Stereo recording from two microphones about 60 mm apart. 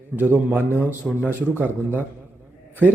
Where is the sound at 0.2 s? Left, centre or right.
Right.